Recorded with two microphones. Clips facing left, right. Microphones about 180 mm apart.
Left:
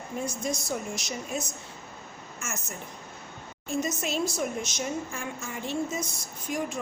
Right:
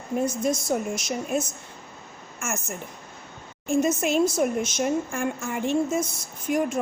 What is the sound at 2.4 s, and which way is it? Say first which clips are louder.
Speech: right 7 dB; 65° right (ahead or behind).